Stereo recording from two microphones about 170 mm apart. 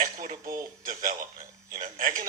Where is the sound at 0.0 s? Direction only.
50° right (ahead or behind).